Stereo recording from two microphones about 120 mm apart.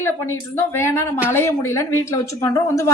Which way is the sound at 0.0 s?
20° left (ahead or behind).